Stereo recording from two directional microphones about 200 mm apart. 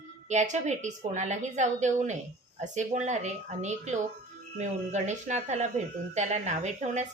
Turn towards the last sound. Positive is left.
turn(degrees=-35)  # may be behind; listen again after turning